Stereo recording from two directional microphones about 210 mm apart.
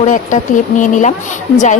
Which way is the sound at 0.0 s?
40° left (ahead or behind).